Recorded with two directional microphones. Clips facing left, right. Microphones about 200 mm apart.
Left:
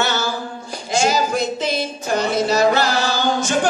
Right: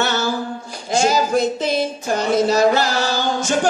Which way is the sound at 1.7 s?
50° right (ahead or behind).